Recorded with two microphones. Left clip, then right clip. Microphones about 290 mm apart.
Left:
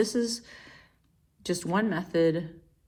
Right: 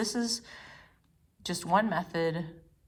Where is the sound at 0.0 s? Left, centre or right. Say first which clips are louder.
Left 5 dB; right.